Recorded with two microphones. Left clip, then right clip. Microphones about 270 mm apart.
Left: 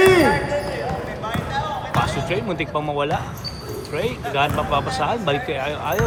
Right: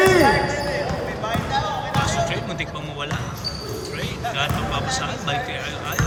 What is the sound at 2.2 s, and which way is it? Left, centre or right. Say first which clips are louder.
Speech: left 2 dB; centre.